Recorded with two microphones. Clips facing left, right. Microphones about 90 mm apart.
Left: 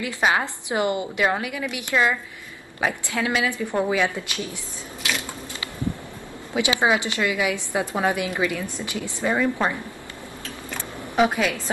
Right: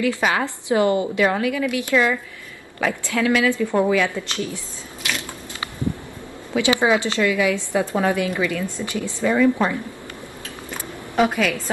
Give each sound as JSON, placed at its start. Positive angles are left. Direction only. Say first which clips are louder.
{"t": 0.0, "sound": "a woman's voice", "louder": "right 2 dB", "side_deg": 25}
{"t": 6.5, "sound": "a woman's voice", "louder": "right 3 dB", "side_deg": 20}
{"t": 11.1, "sound": "a woman's voice", "louder": "right 1 dB", "side_deg": 20}